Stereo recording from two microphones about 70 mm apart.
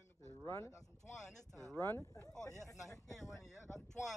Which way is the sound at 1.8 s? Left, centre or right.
Left.